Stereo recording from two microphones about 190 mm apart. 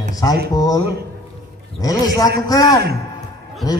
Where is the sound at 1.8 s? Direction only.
20° left (ahead or behind).